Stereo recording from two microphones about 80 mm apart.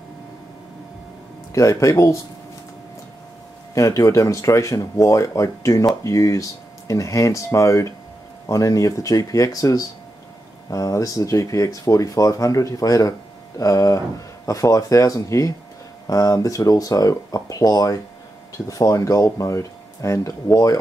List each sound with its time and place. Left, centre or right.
1.5 s speech: left
3.7 s speech: left